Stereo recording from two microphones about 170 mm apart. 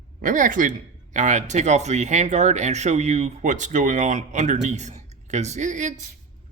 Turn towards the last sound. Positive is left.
turn(degrees=-45)  # may be behind; listen again after turning